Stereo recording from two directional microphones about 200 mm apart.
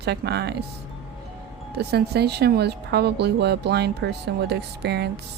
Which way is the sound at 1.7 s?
55° right (ahead or behind).